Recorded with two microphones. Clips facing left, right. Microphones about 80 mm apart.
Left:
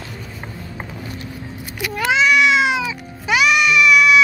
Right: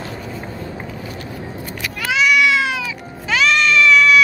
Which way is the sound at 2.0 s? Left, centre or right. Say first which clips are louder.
Left 1 dB; left.